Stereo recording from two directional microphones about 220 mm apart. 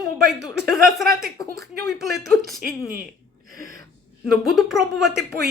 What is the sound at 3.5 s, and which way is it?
Speech, 40° right (ahead or behind).